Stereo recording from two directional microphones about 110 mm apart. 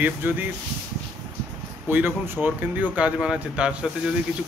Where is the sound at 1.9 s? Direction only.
15° right (ahead or behind).